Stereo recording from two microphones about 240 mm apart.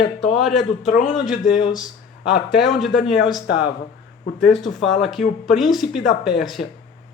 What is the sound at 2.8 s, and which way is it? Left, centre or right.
Speech, centre.